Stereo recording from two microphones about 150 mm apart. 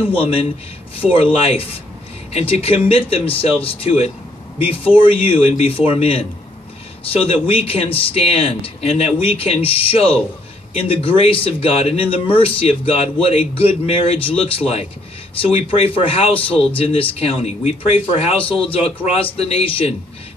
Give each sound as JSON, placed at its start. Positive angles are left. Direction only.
{"t": 0.1, "sound": "speech", "side_deg": 40}